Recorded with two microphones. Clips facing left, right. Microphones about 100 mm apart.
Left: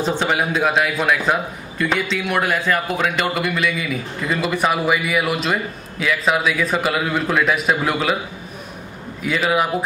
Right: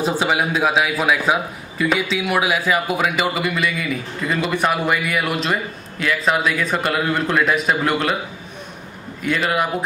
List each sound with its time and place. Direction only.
0.0 s a man's voice: 5° right (ahead or behind)
9.2 s a man's voice: centre (ahead or behind)